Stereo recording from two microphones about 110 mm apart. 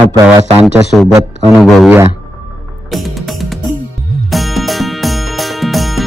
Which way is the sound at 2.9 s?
Centre (ahead or behind).